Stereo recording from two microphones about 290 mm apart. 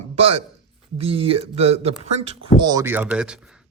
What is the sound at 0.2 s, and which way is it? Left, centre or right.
Speech, centre.